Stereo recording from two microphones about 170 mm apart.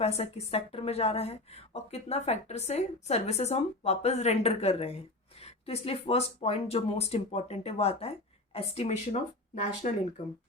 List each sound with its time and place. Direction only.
0.0 s a woman's voice: 40° left (ahead or behind)